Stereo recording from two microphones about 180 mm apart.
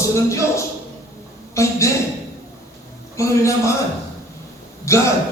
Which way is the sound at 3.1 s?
15° left (ahead or behind).